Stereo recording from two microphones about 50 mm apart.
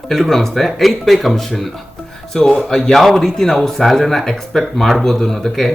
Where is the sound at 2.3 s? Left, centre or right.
Centre.